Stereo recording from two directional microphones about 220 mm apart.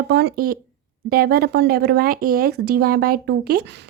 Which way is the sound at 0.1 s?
45° right (ahead or behind).